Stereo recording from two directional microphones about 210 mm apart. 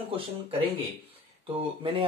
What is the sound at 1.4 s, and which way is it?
Speech, 25° right (ahead or behind).